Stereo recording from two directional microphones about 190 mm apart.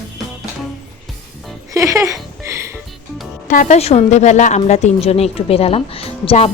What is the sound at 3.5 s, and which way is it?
A woman's voice, 40° left (ahead or behind).